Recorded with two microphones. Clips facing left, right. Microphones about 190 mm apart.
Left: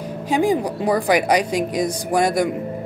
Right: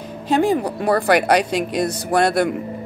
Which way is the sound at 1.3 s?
70° right (ahead or behind).